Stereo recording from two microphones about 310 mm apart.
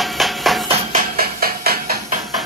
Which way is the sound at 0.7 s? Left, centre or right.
Right.